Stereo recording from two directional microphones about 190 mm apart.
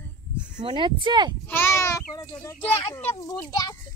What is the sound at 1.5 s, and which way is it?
A child's voice, 15° left (ahead or behind).